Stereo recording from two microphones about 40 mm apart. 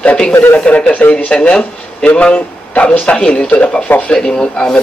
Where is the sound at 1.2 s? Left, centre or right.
Left.